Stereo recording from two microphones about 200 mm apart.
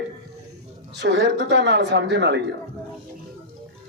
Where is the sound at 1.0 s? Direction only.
60° right (ahead or behind).